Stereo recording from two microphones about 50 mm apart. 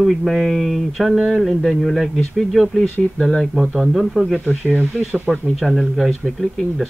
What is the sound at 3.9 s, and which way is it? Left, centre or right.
Speech, centre.